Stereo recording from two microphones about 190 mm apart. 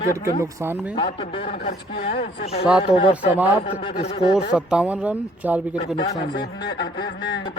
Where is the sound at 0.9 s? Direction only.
25° left (ahead or behind).